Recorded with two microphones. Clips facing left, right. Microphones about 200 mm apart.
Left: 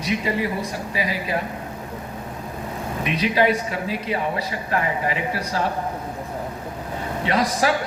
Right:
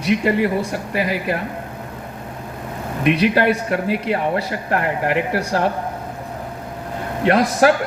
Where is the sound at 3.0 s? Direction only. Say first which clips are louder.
Right 5 dB; 60° right (ahead or behind).